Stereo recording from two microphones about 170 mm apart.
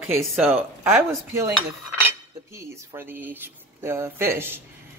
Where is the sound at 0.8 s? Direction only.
15° right (ahead or behind).